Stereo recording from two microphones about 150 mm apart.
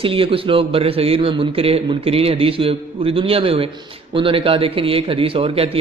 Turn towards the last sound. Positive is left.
turn(degrees=-40)  # may be behind; listen again after turning